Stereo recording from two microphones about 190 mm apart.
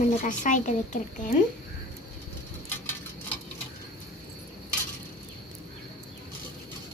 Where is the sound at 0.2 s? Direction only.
40° left (ahead or behind).